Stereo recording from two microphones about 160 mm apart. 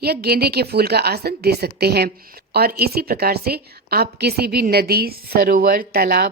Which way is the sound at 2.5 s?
75° right (ahead or behind).